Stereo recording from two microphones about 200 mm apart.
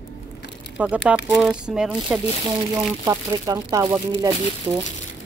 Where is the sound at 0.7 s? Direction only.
5° right (ahead or behind).